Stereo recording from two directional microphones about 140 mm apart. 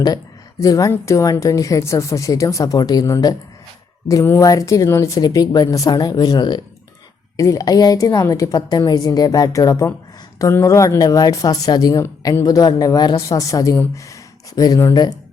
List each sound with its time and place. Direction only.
0.6 s speech: 25° left (ahead or behind)